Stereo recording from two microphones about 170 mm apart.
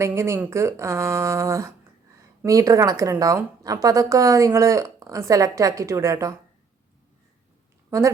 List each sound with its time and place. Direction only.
0.0 s a woman's voice: 15° right (ahead or behind)
7.9 s speech: 20° right (ahead or behind)